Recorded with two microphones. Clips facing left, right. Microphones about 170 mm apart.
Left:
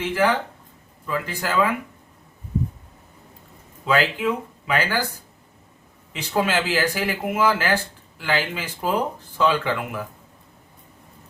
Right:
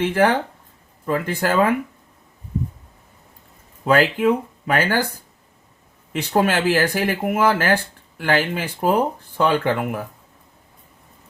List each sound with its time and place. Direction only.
0.0 s speech: 55° right (ahead or behind)
3.8 s speech: 50° right (ahead or behind)
6.3 s speech: 50° right (ahead or behind)